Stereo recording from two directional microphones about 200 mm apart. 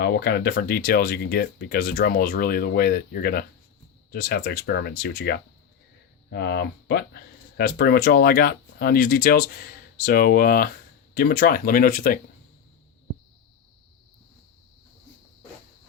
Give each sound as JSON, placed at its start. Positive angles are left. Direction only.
{"t": 0.0, "sound": "speech", "side_deg": 55}